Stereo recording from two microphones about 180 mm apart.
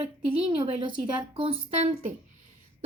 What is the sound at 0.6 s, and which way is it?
A woman's voice, 30° right (ahead or behind).